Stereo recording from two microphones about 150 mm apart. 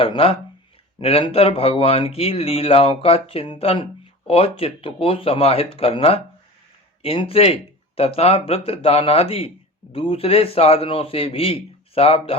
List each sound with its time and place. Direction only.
0.0 s speech: 40° left (ahead or behind)